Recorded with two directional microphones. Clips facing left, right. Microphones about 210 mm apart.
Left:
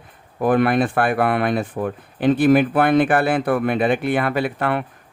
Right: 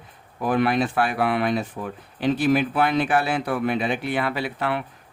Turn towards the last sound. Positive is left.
turn(degrees=55)  # may be behind; listen again after turning